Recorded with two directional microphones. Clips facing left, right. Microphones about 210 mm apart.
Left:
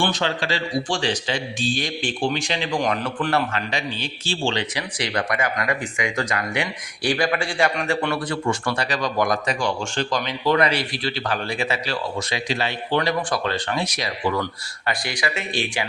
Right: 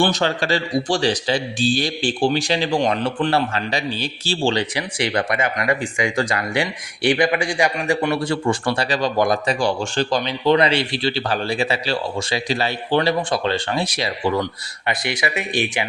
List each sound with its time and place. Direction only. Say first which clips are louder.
0.0 s speech: right 4 dB; 40° right (ahead or behind); by 8.1 s 15° right (ahead or behind)
8.1 s speech: right 4 dB; 30° right (ahead or behind)